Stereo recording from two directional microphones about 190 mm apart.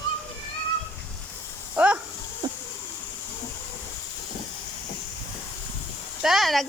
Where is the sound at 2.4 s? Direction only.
20° right (ahead or behind).